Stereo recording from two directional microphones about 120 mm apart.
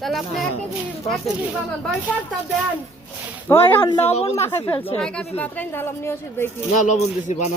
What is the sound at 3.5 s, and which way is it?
Speech, 20° left (ahead or behind).